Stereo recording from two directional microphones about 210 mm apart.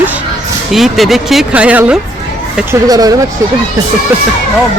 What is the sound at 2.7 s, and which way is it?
Speech, 15° right (ahead or behind).